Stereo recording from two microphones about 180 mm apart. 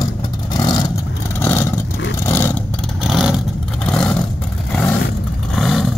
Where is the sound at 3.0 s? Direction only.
Centre (ahead or behind).